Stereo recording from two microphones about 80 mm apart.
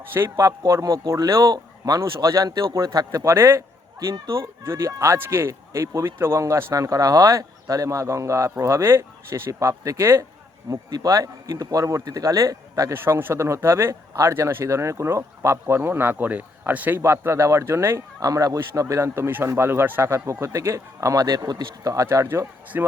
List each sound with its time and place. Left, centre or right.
0.0 s a man's voice: right
0.3 s speech: right
10.7 s speech: right
12.9 s speech: right
17.0 s speech: right